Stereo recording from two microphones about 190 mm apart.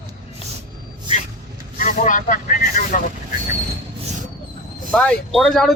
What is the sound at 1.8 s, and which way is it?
Speech, 45° left (ahead or behind).